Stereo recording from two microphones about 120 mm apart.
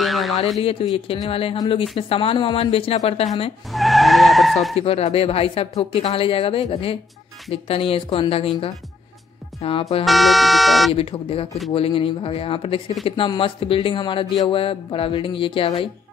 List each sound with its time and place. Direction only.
0.0 s a sound: centre (ahead or behind)
0.6 s speech: 50° left (ahead or behind)
3.7 s skidding: centre (ahead or behind)
4.7 s speech: 55° left (ahead or behind)
10.0 s speech: centre (ahead or behind)
11.0 s speech: 50° left (ahead or behind)